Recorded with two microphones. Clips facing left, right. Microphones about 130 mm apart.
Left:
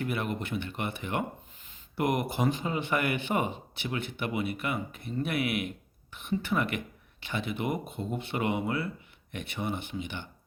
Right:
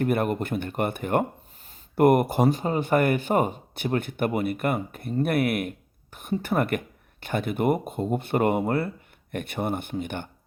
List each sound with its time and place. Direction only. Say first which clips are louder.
0.0 s speech: right 8 dB; 50° right (ahead or behind)